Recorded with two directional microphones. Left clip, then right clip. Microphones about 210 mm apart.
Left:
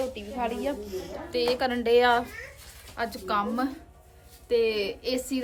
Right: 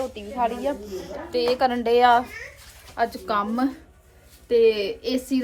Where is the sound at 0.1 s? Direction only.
5° right (ahead or behind).